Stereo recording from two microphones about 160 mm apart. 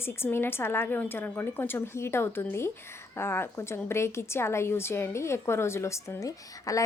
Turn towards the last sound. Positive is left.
turn(degrees=20)  # may be behind; listen again after turning